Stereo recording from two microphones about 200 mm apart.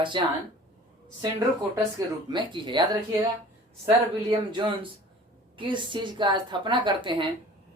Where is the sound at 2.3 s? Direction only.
25° right (ahead or behind).